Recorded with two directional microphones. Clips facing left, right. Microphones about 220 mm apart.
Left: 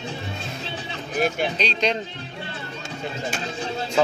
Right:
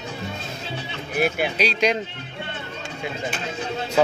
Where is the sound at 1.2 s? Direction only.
10° right (ahead or behind).